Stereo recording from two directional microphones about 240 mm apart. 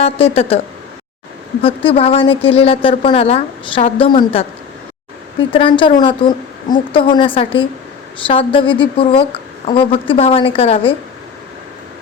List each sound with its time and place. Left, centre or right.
0.0 s a woman's voice: left
1.6 s a woman's voice: left